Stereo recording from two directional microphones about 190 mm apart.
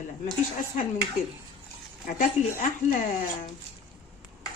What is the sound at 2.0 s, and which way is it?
Speech, 45° left (ahead or behind).